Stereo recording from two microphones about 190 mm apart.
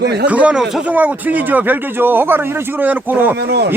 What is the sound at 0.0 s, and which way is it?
Speech, 60° right (ahead or behind).